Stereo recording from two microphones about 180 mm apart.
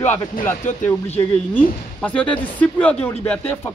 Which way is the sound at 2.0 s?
5° left (ahead or behind).